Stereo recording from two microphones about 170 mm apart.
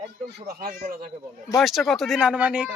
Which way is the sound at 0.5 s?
55° right (ahead or behind).